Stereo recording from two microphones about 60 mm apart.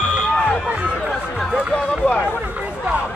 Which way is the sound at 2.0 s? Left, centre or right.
Left.